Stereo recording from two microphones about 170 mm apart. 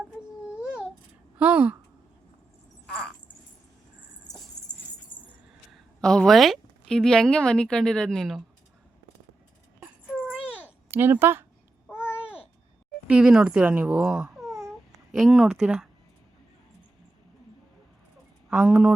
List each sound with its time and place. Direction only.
0.6 s a sound: 5° right (ahead or behind)
1.4 s speech: 10° right (ahead or behind)
4.6 s dog: 20° left (ahead or behind)
5.7 s a woman's voice: 5° left (ahead or behind)
9.8 s a sound: 10° right (ahead or behind)
10.9 s speech: 10° right (ahead or behind)
11.9 s babbling: 10° left (ahead or behind)
13.1 s speech: 5° right (ahead or behind)
18.5 s speech: 5° right (ahead or behind)